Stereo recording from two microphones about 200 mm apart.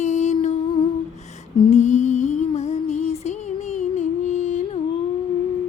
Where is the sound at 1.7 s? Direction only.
35° left (ahead or behind).